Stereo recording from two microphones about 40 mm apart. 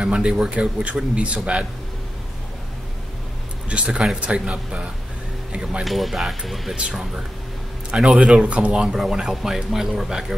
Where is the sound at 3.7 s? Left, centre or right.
Right.